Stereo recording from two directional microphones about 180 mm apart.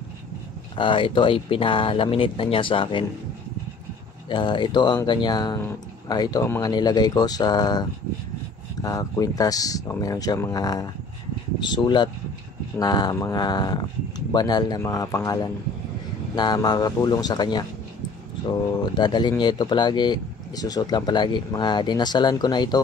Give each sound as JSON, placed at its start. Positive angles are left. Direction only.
{"t": 0.7, "sound": "speech", "side_deg": 30}
{"t": 4.3, "sound": "speech", "side_deg": 25}
{"t": 18.8, "sound": "speech", "side_deg": 25}